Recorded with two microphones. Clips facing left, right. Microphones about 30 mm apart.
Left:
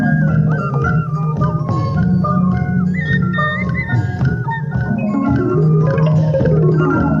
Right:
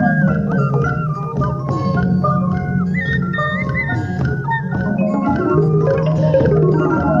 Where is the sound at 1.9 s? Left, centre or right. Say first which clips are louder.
Left 1 dB; centre.